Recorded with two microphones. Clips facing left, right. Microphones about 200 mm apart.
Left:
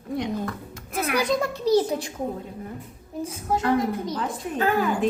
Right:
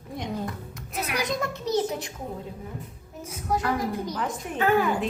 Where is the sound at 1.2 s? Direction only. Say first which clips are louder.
Left 5 dB; 30° left (ahead or behind).